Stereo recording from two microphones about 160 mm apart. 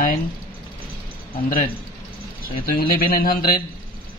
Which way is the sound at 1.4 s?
60° left (ahead or behind).